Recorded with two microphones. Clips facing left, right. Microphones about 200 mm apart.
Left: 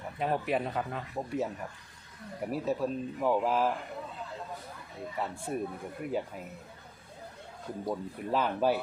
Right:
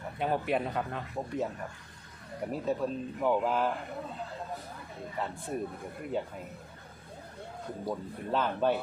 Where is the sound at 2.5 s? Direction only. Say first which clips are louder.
Left 1 dB; 5° left (ahead or behind).